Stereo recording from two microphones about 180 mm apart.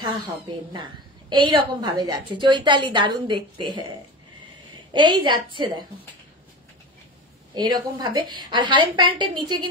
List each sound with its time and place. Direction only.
1.3 s a woman's voice: 25° right (ahead or behind)
4.9 s a woman's voice: 25° right (ahead or behind)
7.5 s a woman's voice: 20° right (ahead or behind)